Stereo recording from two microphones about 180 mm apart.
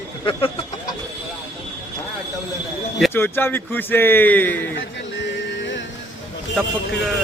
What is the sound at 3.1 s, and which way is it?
A man's voice, 10° left (ahead or behind).